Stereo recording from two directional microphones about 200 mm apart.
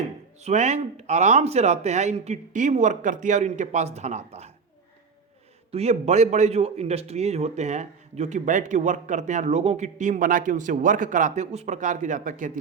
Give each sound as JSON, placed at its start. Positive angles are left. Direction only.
{"t": 0.4, "sound": "a man's voice", "side_deg": -35}
{"t": 5.7, "sound": "a man's voice", "side_deg": -35}